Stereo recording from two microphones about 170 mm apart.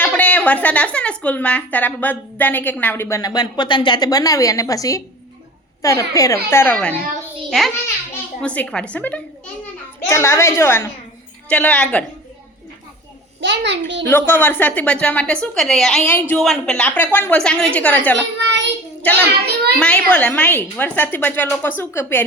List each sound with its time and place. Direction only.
0.0 s a woman's voice: 10° left (ahead or behind)
8.1 s a child's voice: 5° left (ahead or behind)
13.4 s a child's voice: 90° right
14.1 s a woman's voice: 10° left (ahead or behind)
18.3 s child singing: 90° right
19.3 s a child's voice: 70° right (ahead or behind)
19.8 s a woman's voice: 5° left (ahead or behind)